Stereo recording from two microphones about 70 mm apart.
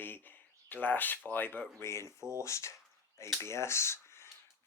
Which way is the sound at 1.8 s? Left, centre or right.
Left.